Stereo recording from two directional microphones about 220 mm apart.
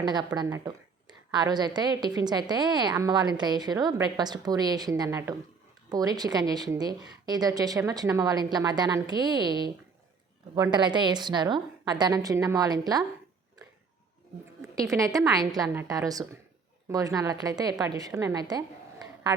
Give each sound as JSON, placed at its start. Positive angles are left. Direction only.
{"t": 0.0, "sound": "a woman's voice", "side_deg": -20}
{"t": 14.8, "sound": "a woman's voice", "side_deg": -15}